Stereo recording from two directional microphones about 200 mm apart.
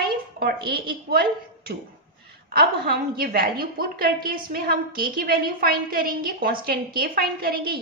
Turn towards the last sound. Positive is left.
turn(degrees=-50)  # may be behind; listen again after turning